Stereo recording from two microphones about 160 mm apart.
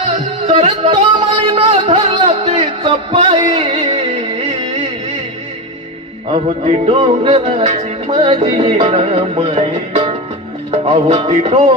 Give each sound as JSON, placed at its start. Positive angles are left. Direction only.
{"t": 0.0, "sound": "music", "side_deg": -45}
{"t": 1.4, "sound": "music", "side_deg": -35}
{"t": 6.3, "sound": "music", "side_deg": -40}